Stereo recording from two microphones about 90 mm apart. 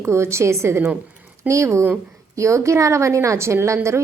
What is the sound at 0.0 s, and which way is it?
A woman's voice, 30° right (ahead or behind).